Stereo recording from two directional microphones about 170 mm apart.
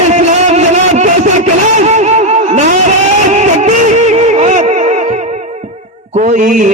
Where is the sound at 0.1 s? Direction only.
40° right (ahead or behind).